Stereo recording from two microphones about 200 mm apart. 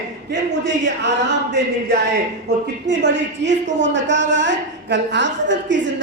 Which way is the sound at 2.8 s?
60° right (ahead or behind).